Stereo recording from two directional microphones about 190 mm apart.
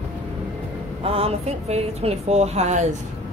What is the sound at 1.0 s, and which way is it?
Speech, 30° right (ahead or behind).